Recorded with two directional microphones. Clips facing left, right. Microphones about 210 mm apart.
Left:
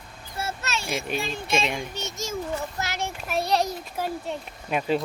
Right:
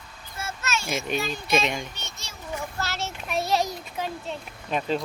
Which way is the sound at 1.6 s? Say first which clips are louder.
Even; centre (ahead or behind).